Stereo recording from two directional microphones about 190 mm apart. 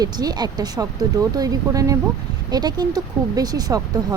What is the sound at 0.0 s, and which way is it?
Speech, 20° right (ahead or behind).